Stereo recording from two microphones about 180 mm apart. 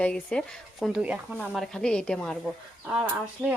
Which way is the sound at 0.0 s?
5° left (ahead or behind).